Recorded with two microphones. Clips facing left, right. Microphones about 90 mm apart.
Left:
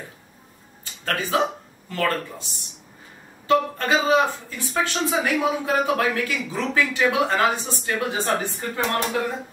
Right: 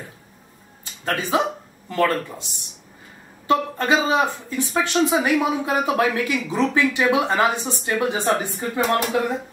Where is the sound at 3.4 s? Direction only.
20° right (ahead or behind).